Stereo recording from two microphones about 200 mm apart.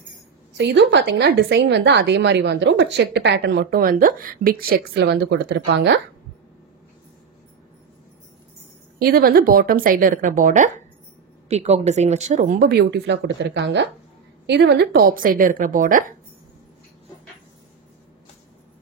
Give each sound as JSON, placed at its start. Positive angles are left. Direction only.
{"t": 0.6, "sound": "a woman's voice", "side_deg": -60}
{"t": 9.0, "sound": "a woman's voice", "side_deg": -50}
{"t": 12.4, "sound": "a woman's voice", "side_deg": -50}